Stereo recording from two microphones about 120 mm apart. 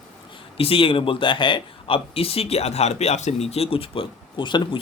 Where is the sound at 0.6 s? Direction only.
50° left (ahead or behind).